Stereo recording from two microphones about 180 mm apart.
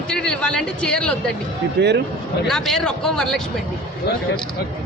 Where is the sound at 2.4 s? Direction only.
5° left (ahead or behind).